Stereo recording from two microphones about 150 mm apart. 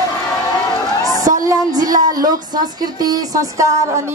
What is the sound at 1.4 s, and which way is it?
A woman's voice, 25° right (ahead or behind).